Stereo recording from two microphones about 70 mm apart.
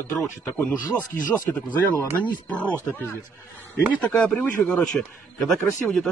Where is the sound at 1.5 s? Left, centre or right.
Left.